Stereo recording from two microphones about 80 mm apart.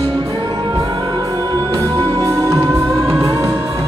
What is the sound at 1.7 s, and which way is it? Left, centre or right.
Music, right.